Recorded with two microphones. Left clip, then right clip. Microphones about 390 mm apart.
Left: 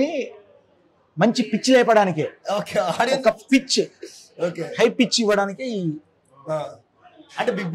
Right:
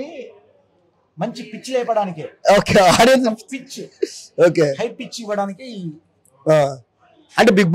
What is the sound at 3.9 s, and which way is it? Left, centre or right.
Speech, right.